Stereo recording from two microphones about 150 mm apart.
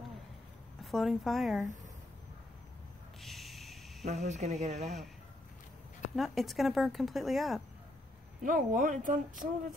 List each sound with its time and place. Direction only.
0.8 s speech: centre (ahead or behind)
3.2 s a sound: centre (ahead or behind)
4.0 s speech: 45° right (ahead or behind)
6.1 s speech: centre (ahead or behind)
8.4 s speech: 65° right (ahead or behind)